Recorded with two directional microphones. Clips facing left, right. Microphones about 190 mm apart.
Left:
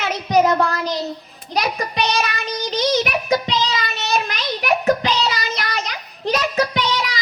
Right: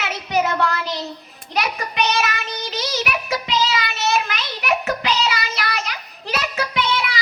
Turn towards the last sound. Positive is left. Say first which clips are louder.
# even
turn(degrees=35)  # may be behind; listen again after turning